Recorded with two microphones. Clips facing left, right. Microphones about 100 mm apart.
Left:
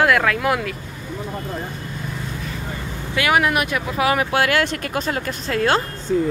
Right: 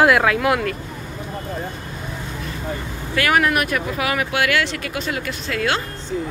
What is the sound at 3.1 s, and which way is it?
Speech, 20° left (ahead or behind).